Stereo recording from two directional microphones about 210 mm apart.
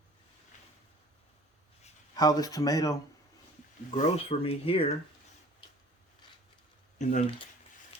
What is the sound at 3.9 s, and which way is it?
Speech, 30° left (ahead or behind).